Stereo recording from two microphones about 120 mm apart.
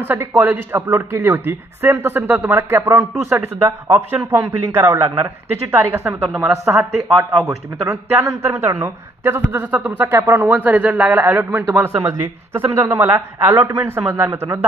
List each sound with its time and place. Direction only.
0.0 s speech: 20° right (ahead or behind)